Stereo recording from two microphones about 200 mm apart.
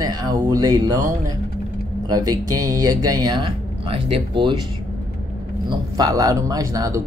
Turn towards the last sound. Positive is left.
turn(degrees=-15)  # may be behind; listen again after turning